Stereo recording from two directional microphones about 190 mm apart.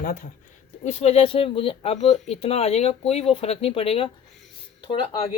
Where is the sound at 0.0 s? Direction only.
50° left (ahead or behind).